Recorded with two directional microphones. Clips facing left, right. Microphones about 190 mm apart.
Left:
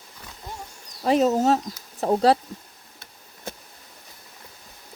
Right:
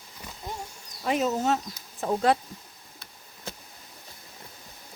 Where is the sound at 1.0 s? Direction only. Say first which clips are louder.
Left 6 dB; 35° left (ahead or behind).